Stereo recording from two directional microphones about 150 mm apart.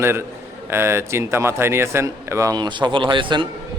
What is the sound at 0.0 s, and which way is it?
A man's voice, 15° right (ahead or behind).